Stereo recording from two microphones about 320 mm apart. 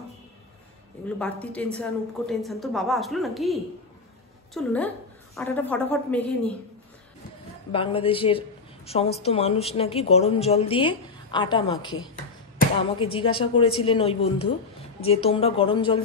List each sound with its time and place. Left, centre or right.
1.0 s a woman's voice: centre
4.6 s a woman's voice: centre
7.7 s a woman's voice: centre
13.0 s a woman's voice: centre